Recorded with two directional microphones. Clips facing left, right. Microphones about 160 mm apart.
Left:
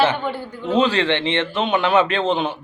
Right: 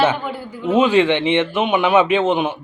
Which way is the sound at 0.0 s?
Centre (ahead or behind).